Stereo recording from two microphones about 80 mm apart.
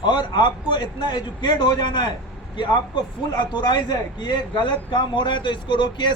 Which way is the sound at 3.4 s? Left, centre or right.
Left.